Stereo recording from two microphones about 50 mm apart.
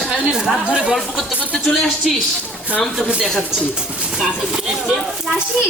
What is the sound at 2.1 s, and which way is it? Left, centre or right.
Speech, centre.